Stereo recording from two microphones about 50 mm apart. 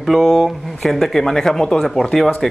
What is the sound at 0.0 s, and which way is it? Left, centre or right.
Speech, centre.